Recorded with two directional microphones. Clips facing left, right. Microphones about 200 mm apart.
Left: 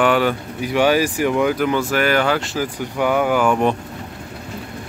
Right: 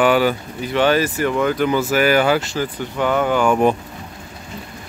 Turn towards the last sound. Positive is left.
turn(degrees=5)  # may be behind; listen again after turning